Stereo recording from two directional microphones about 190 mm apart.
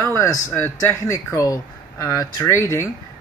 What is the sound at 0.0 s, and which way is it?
Speech, 15° left (ahead or behind).